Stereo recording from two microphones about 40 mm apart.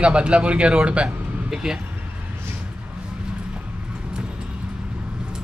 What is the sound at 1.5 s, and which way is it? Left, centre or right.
Speech, centre.